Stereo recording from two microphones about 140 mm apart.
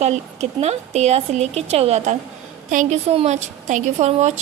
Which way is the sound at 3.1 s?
50° right (ahead or behind).